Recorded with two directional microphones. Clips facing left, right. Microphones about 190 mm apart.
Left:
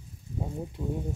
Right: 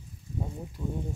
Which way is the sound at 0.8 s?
30° left (ahead or behind).